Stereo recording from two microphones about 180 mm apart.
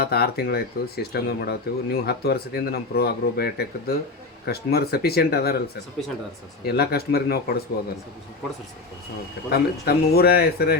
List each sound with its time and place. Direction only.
0.0 s speech: 60° left (ahead or behind)
6.7 s speech: 60° left (ahead or behind)
9.5 s speech: 60° left (ahead or behind)